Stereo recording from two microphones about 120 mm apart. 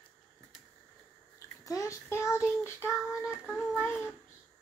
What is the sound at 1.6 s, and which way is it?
Child singing, 25° left (ahead or behind).